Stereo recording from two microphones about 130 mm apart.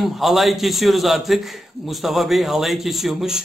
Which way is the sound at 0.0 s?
Centre (ahead or behind).